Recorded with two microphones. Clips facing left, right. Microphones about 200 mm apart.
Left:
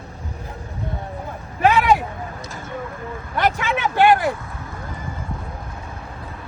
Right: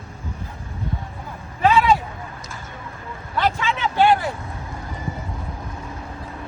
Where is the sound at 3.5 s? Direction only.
60° left (ahead or behind).